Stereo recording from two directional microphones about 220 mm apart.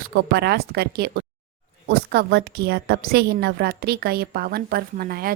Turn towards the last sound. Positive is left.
turn(degrees=-45)  # may be behind; listen again after turning